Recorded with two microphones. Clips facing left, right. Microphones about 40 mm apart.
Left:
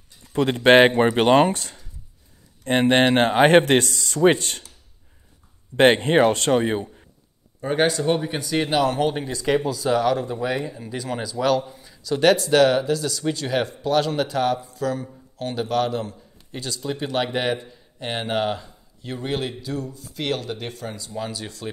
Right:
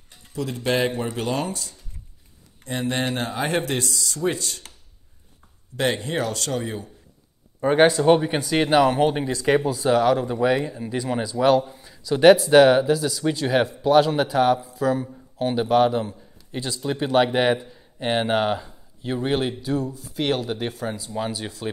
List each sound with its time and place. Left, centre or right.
0.3 s a man's voice: left
5.8 s speech: left
7.6 s speech: centre
9.1 s a man's voice: centre